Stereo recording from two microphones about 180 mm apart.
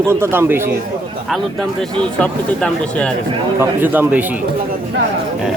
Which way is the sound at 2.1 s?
5° left (ahead or behind).